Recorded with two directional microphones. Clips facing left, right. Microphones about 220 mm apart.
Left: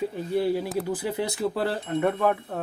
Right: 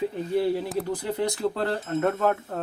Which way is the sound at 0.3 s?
Centre (ahead or behind).